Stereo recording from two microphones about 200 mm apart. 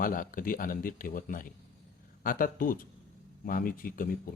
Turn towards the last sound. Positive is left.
turn(degrees=45)  # may be behind; listen again after turning